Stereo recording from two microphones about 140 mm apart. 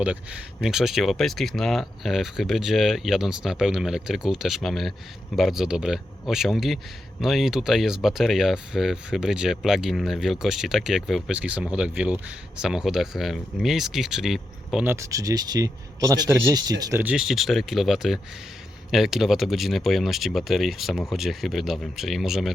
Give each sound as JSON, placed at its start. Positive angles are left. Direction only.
{"t": 0.6, "sound": "speech", "side_deg": -5}
{"t": 14.8, "sound": "speech", "side_deg": -20}
{"t": 17.0, "sound": "speech", "side_deg": -5}